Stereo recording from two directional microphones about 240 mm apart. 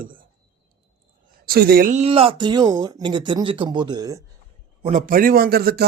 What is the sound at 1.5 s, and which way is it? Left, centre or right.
Speech, right.